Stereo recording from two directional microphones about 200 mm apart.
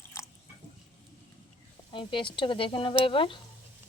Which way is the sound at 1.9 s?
25° left (ahead or behind).